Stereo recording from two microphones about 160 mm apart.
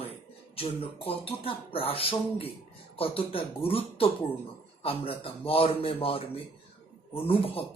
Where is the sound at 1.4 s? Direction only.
35° left (ahead or behind).